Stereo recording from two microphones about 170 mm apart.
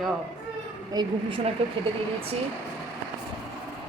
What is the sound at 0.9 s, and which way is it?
Speech, 25° right (ahead or behind).